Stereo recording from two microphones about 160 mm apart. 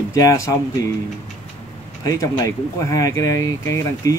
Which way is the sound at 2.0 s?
20° left (ahead or behind).